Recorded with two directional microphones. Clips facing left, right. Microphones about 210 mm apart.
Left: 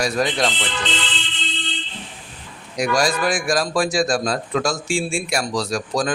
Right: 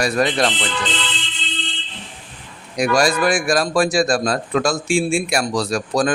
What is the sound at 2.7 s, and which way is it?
A man's voice, 60° right (ahead or behind).